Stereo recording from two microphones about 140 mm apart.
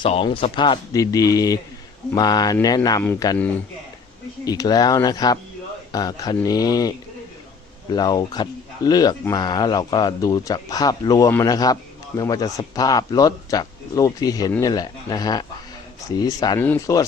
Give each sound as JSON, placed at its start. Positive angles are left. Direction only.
{"t": 0.0, "sound": "speech", "side_deg": 40}
{"t": 0.9, "sound": "a man's voice", "side_deg": 25}
{"t": 4.4, "sound": "a man's voice", "side_deg": 25}
{"t": 7.9, "sound": "a man's voice", "side_deg": 30}
{"t": 16.6, "sound": "speech", "side_deg": 15}
{"t": 16.8, "sound": "a man's voice", "side_deg": 25}